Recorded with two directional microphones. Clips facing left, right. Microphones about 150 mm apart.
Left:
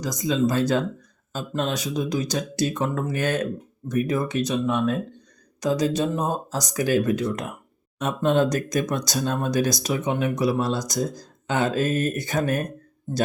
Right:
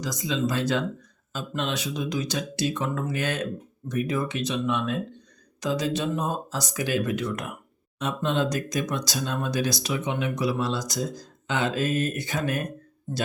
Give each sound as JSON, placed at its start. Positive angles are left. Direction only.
{"t": 0.0, "sound": "speech", "side_deg": 45}
{"t": 7.9, "sound": "speech", "side_deg": 50}